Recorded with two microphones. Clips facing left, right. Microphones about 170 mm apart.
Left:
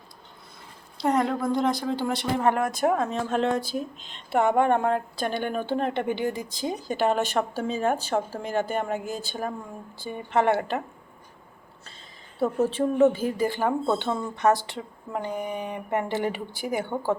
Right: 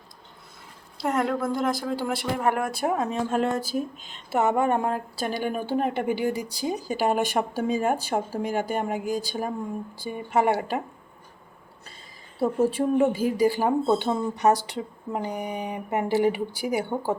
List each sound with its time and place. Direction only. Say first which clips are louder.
1.0 s a woman's voice: left 1 dB; 5° right (ahead or behind)
12.4 s a woman's voice: right 1 dB; 10° right (ahead or behind)